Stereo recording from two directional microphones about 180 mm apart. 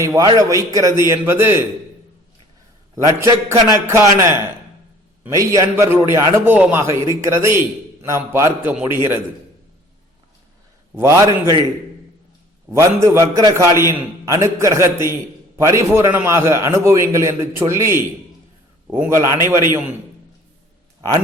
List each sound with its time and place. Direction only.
0.0 s a man's voice: 20° right (ahead or behind)
2.9 s a man's voice: 15° right (ahead or behind)
10.9 s a man's voice: 15° right (ahead or behind)
12.7 s a man's voice: 15° right (ahead or behind)